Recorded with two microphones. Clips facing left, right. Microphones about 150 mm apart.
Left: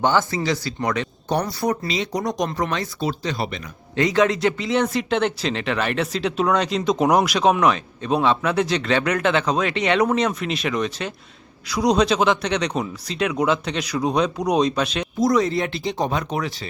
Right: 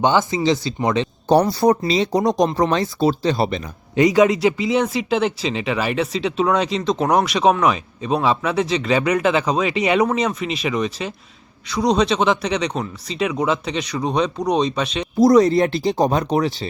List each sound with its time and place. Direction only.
0.0 s speech: 20° right (ahead or behind)
3.9 s speech: 15° right (ahead or behind); by 15.0 s centre (ahead or behind)
15.2 s speech: 40° right (ahead or behind)